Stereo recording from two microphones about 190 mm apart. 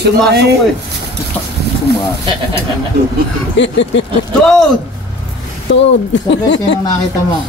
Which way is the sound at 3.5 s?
70° left (ahead or behind).